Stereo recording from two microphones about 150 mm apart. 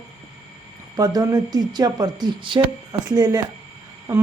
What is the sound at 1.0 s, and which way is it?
Speech, 25° right (ahead or behind).